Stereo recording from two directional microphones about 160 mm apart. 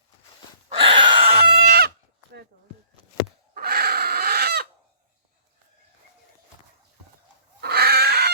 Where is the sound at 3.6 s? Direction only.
75° right (ahead or behind).